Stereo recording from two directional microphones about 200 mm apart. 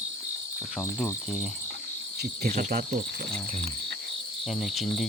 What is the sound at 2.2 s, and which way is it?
Speech, 45° right (ahead or behind).